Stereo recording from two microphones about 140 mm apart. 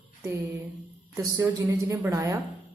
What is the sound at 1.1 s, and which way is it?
Speech, 25° right (ahead or behind).